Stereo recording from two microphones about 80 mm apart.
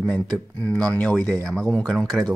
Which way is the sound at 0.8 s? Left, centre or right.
Centre.